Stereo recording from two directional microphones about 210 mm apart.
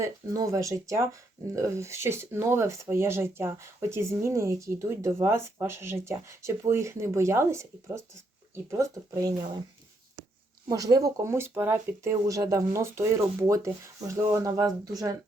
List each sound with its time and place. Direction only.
0.0 s speech: 15° right (ahead or behind)
10.7 s speech: 15° right (ahead or behind)